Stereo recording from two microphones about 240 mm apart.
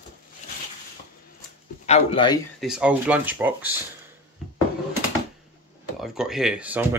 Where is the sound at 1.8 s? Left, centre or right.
Left.